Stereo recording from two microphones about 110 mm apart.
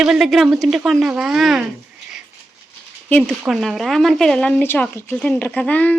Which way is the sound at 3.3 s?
Centre (ahead or behind).